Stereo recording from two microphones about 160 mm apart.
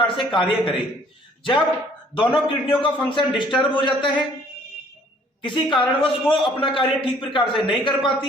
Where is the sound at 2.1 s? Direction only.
35° left (ahead or behind).